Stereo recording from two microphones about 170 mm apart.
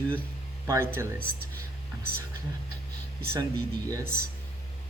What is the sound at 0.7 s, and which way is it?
Speech, 15° right (ahead or behind).